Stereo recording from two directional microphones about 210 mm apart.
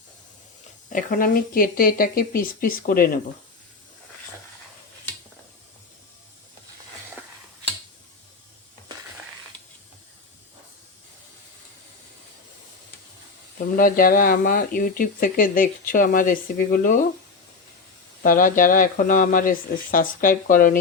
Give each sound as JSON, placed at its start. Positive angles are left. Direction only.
{"t": 0.9, "sound": "speech", "side_deg": 40}
{"t": 13.7, "sound": "speech", "side_deg": 40}
{"t": 18.2, "sound": "speech", "side_deg": 40}